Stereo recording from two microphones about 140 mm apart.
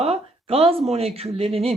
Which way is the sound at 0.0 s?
45° right (ahead or behind).